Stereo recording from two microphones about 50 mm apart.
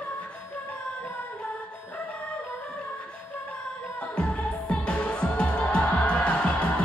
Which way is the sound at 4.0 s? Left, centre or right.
Left.